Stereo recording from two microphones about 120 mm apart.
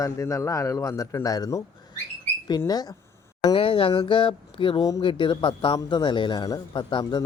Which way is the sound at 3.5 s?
50° left (ahead or behind).